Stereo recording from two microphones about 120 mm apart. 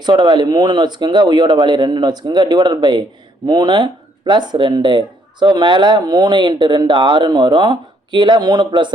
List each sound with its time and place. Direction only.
0.0 s speech: 40° right (ahead or behind)